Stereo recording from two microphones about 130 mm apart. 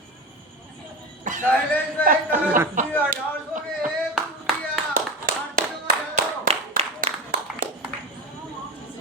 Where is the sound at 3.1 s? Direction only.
90° right.